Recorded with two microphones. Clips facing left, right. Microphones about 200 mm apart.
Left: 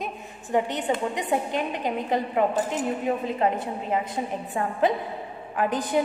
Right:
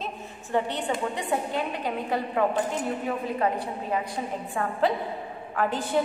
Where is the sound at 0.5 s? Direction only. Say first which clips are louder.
Left 2 dB; 15° left (ahead or behind).